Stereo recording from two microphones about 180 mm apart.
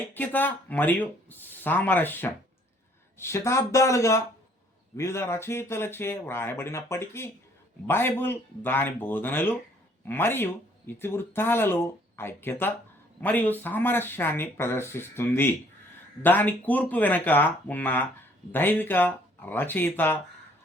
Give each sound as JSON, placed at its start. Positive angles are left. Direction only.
{"t": 0.0, "sound": "speech", "side_deg": 10}